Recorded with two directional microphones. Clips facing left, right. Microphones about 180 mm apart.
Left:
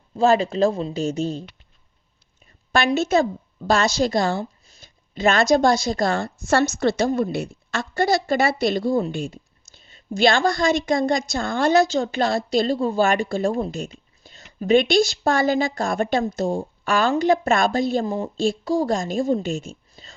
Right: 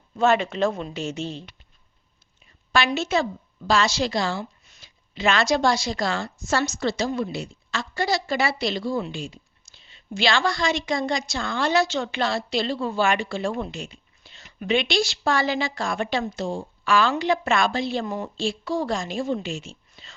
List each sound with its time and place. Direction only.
0.2 s a woman's voice: 35° left (ahead or behind)